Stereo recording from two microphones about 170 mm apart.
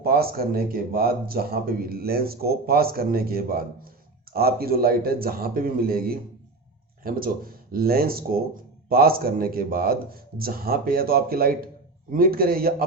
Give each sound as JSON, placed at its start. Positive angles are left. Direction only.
{"t": 0.0, "sound": "speech", "side_deg": -60}